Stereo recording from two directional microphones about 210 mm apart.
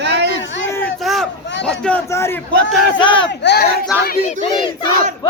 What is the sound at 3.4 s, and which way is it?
Speech, 55° left (ahead or behind).